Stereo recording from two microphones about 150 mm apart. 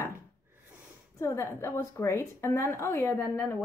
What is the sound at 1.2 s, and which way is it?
A woman's voice, 15° left (ahead or behind).